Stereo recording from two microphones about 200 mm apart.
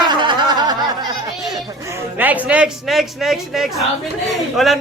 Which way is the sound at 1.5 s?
15° right (ahead or behind).